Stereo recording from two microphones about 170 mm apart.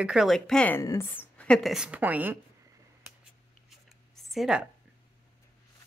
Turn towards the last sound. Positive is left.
turn(degrees=-5)  # may be behind; listen again after turning